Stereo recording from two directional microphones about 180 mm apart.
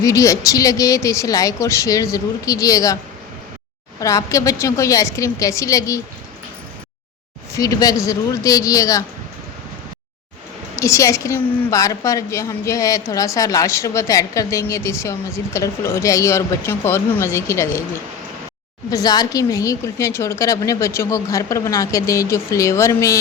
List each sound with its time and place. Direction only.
0.0 s a woman's voice: 20° left (ahead or behind)
4.0 s a woman's voice: 20° left (ahead or behind)
7.5 s a woman's voice: 20° left (ahead or behind)
10.8 s a woman's voice: 15° left (ahead or behind)
18.9 s a woman's voice: 20° left (ahead or behind)